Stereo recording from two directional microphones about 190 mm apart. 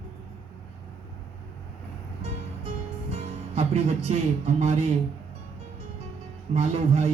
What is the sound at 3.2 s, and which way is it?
Speech, 35° right (ahead or behind).